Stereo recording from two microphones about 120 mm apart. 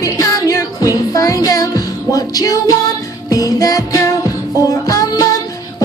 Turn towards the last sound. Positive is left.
turn(degrees=30)  # may be behind; listen again after turning